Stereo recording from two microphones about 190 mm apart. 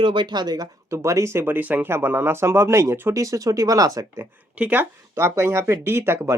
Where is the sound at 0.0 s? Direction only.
25° right (ahead or behind).